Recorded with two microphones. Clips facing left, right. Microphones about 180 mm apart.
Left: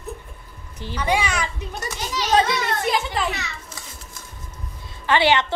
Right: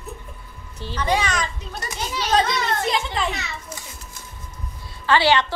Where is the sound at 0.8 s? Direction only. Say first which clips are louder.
Even; 10° left (ahead or behind).